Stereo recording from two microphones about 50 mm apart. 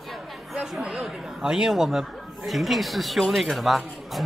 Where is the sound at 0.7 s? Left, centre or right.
Centre.